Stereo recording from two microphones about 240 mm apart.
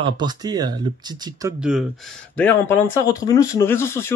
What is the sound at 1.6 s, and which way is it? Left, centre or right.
Speech, centre.